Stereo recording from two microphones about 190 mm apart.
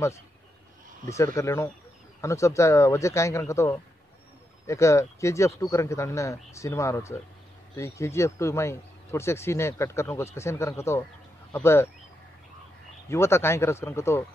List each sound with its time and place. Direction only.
1.0 s speech: 15° left (ahead or behind)
13.1 s speech: 15° left (ahead or behind)